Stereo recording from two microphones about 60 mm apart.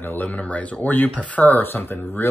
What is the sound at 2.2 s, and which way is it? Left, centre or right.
Mantra, left.